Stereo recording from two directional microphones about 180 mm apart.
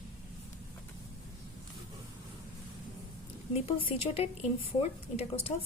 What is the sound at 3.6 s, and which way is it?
Speech, 30° left (ahead or behind).